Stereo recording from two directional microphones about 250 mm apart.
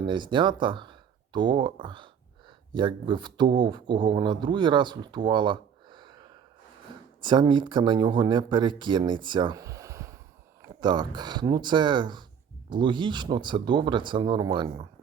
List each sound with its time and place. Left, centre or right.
0.1 s speech: centre